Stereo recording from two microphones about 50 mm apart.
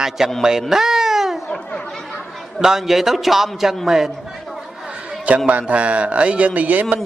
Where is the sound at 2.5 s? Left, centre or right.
Centre.